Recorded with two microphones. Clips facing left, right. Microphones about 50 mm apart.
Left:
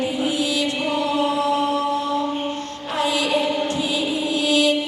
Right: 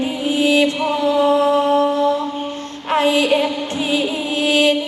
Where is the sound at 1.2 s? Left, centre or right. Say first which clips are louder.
Right 6 dB; right.